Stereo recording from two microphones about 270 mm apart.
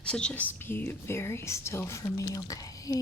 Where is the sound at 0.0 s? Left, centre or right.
Centre.